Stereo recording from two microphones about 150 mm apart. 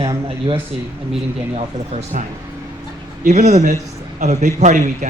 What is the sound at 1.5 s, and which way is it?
Speech, 45° right (ahead or behind).